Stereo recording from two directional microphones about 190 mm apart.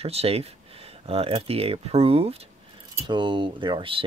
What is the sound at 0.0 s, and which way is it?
Speech, 30° right (ahead or behind).